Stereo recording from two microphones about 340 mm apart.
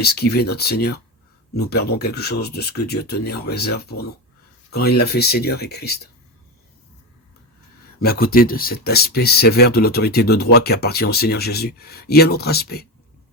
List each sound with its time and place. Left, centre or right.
0.0 s speech: left
8.0 s speech: left